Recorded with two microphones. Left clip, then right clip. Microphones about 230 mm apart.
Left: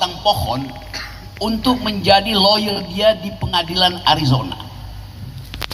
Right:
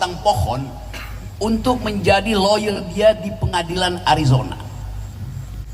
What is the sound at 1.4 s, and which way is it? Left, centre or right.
A man's voice, left.